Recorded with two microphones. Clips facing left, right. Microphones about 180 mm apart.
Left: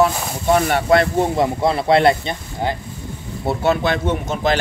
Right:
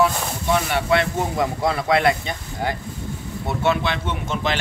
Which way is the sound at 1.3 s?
25° left (ahead or behind).